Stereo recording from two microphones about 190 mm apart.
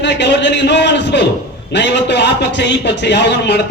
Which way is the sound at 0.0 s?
65° left (ahead or behind).